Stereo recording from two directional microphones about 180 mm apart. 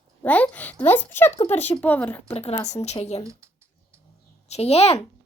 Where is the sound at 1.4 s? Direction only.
35° left (ahead or behind).